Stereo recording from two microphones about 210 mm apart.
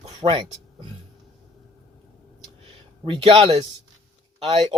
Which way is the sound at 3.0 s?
25° right (ahead or behind).